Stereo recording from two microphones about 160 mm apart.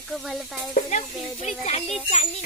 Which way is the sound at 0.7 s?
50° left (ahead or behind).